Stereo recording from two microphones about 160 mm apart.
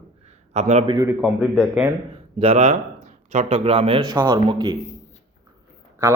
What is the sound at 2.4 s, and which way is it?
A man's voice, 40° right (ahead or behind).